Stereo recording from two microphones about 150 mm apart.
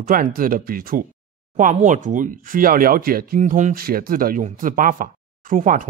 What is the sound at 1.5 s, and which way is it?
Speech, 55° right (ahead or behind).